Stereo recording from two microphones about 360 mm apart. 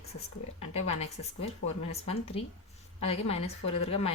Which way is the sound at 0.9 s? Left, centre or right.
Centre.